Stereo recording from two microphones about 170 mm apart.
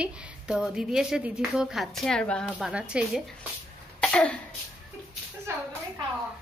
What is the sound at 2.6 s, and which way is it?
Speech, 5° right (ahead or behind).